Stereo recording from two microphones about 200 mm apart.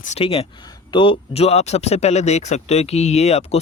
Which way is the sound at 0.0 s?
30° left (ahead or behind).